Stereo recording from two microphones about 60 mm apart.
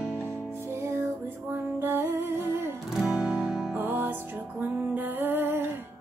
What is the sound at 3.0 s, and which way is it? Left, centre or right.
Music, centre.